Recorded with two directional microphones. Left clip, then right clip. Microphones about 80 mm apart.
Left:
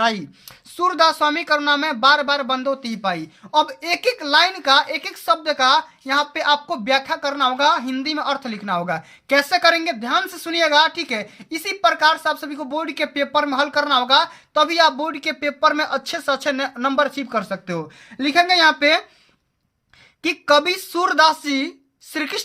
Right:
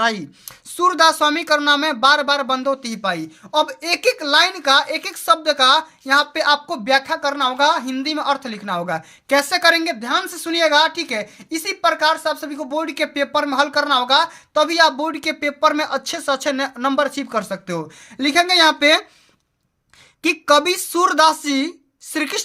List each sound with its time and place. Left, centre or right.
0.0 s speech: right
0.8 s speech: right
17.1 s speech: right
20.2 s speech: right